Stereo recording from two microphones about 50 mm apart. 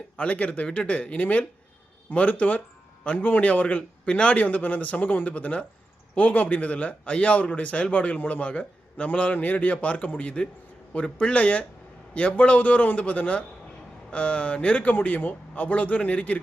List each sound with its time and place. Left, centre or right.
0.2 s speech: left